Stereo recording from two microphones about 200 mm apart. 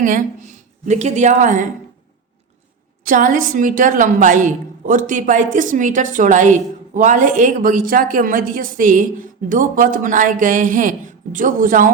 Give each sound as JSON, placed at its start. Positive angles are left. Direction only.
{"t": 0.0, "sound": "a woman's voice", "side_deg": -40}
{"t": 3.0, "sound": "a woman's voice", "side_deg": -40}